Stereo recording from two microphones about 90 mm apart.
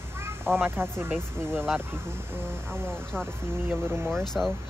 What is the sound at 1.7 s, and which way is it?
Speech, 25° right (ahead or behind).